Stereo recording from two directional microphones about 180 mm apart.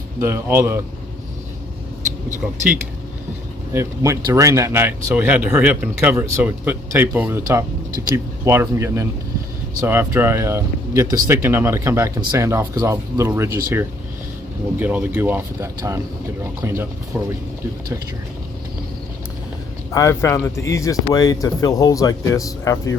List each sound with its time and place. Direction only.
0.2 s speech: 15° right (ahead or behind)
3.7 s speech: 15° right (ahead or behind)
14.8 s speech: 10° right (ahead or behind)
19.9 s speech: 15° left (ahead or behind)